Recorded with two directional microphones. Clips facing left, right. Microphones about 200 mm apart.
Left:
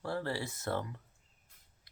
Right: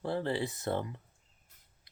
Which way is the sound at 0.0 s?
20° right (ahead or behind).